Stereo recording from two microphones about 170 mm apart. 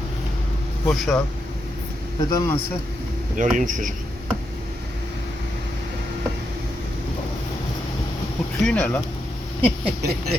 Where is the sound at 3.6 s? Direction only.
50° right (ahead or behind).